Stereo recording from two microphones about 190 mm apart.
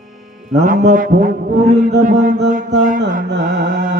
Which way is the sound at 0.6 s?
40° right (ahead or behind).